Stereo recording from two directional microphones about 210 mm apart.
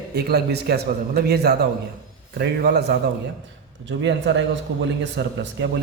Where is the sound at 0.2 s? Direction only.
50° right (ahead or behind).